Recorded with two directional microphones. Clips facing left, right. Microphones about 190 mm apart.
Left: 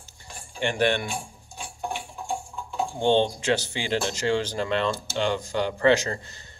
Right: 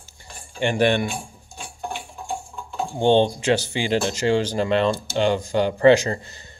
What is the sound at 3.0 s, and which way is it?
Speech, 15° right (ahead or behind).